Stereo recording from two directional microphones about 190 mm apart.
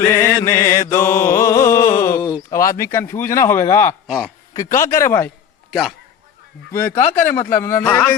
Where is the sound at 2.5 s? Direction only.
15° left (ahead or behind).